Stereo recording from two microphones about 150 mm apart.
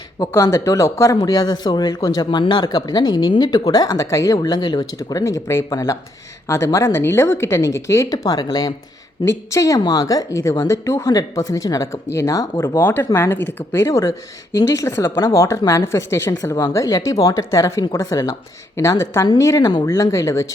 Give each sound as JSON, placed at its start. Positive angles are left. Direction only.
{"t": 0.2, "sound": "a woman's voice", "side_deg": 25}